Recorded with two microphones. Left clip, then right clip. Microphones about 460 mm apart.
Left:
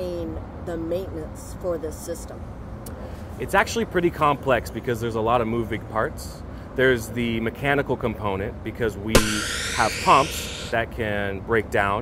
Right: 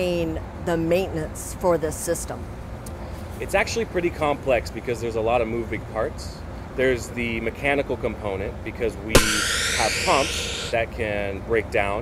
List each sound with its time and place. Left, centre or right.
0.0 s vehicle: right
1.7 s speech: right
3.3 s speech: left
9.1 s speech: centre
10.8 s speech: left